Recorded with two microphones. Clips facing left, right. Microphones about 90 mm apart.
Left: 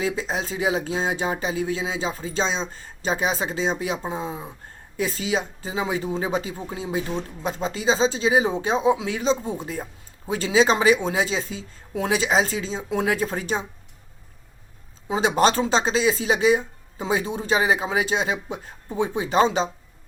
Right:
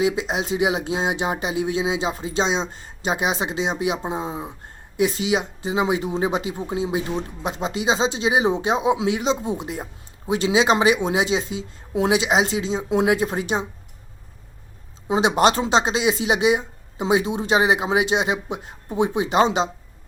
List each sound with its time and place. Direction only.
0.0 s speech: 15° right (ahead or behind)
15.0 s speech: 15° right (ahead or behind)